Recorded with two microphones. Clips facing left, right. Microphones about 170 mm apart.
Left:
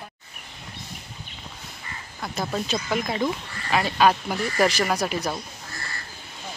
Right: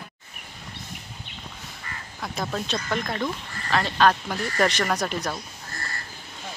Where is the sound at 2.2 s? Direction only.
5° left (ahead or behind).